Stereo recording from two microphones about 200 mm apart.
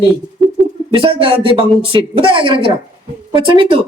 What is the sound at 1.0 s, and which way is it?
Speech, 25° right (ahead or behind).